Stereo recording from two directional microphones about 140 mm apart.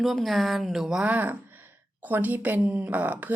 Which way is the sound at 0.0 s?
Centre (ahead or behind).